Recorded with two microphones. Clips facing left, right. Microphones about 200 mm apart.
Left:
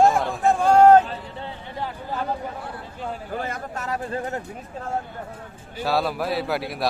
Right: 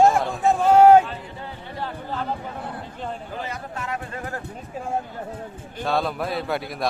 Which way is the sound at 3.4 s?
45° left (ahead or behind).